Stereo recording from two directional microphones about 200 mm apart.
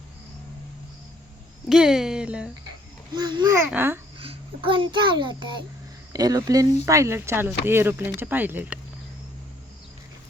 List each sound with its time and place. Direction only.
1.7 s speech: centre (ahead or behind)
3.2 s speech: 20° right (ahead or behind)
3.7 s speech: 10° right (ahead or behind)
4.2 s a child's voice: 25° right (ahead or behind); by 8.8 s 10° right (ahead or behind)